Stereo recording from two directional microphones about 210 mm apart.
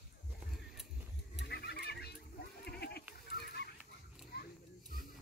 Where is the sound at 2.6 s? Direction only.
50° left (ahead or behind).